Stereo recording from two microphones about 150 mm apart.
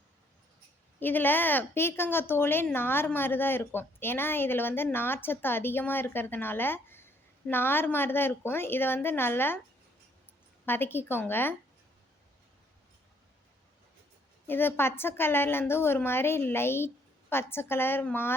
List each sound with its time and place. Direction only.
0.9 s a woman's voice: 15° left (ahead or behind)
10.7 s a woman's voice: 15° left (ahead or behind)
14.4 s a woman's voice: 15° left (ahead or behind)